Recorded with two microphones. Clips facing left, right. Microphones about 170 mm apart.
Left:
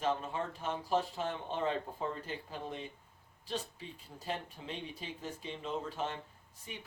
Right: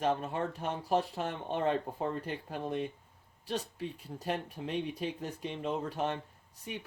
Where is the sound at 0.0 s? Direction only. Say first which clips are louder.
Right 3 dB; 60° right (ahead or behind).